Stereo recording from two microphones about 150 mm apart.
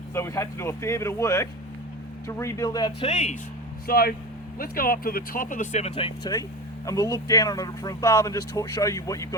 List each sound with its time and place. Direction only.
0.1 s speech: 20° left (ahead or behind)
3.1 s speech: 50° left (ahead or behind)
3.8 s speech: 90° left
4.5 s speech: 75° left (ahead or behind); by 9.3 s 20° left (ahead or behind)